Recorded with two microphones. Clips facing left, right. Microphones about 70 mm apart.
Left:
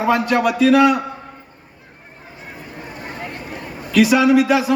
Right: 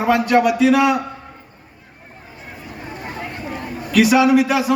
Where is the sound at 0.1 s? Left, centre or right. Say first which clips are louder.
Right 3 dB; centre.